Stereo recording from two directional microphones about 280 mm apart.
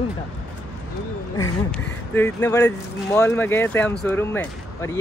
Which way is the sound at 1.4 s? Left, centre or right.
Centre.